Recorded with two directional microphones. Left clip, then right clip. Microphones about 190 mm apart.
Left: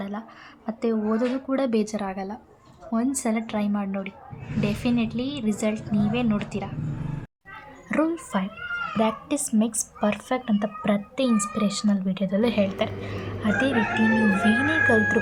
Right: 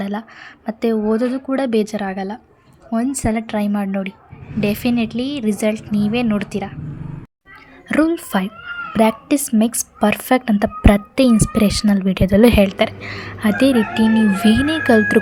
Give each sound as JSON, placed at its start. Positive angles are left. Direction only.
{"t": 0.0, "sound": "speech", "side_deg": -25}
{"t": 7.9, "sound": "a woman's voice", "side_deg": -20}